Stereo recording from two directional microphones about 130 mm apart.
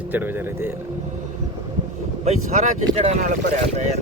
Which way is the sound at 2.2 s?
60° right (ahead or behind).